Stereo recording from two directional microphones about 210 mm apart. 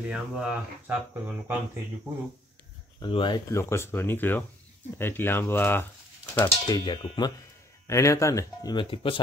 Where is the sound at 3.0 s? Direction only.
25° left (ahead or behind).